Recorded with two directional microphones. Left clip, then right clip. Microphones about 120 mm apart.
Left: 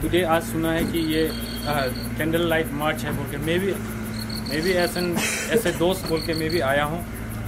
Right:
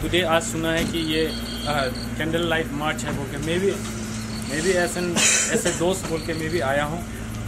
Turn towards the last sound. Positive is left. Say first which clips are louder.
# left 1 dB
turn(degrees=25)  # may be behind; listen again after turning